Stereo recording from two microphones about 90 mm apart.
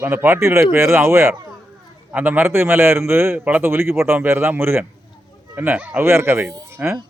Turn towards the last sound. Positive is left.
turn(degrees=-25)  # may be behind; listen again after turning